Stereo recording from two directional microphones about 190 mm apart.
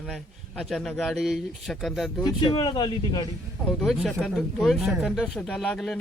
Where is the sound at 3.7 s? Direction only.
Centre (ahead or behind).